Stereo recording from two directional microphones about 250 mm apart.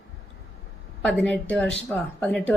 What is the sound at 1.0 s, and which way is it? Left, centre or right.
A woman's voice, centre.